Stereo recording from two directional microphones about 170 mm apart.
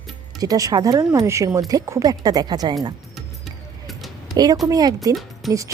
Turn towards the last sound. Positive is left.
turn(degrees=0)  # may be behind; listen again after turning